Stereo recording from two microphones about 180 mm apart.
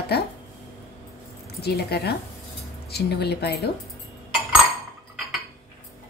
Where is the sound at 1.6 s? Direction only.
65° left (ahead or behind).